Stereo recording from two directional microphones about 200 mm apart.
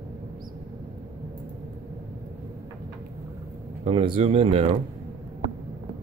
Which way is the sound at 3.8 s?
30° right (ahead or behind).